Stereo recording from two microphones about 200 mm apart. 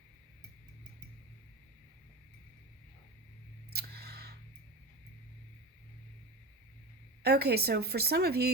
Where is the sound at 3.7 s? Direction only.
55° right (ahead or behind).